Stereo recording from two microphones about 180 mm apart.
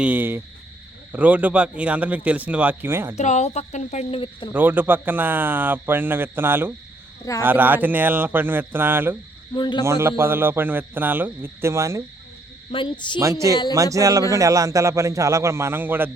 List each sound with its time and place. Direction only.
0.0 s speech: 10° right (ahead or behind)
3.2 s speech: 40° left (ahead or behind)
4.5 s speech: 10° right (ahead or behind)
9.6 s speech: 25° left (ahead or behind)
9.8 s speech: 15° right (ahead or behind)
12.7 s speech: 25° left (ahead or behind)
13.1 s speech: 15° right (ahead or behind)